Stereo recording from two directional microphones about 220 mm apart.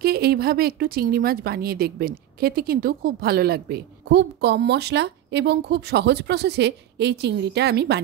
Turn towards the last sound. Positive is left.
turn(degrees=-50)  # may be behind; listen again after turning